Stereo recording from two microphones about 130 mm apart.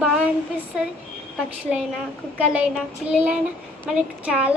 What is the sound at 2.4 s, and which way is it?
A child's voice, 10° right (ahead or behind).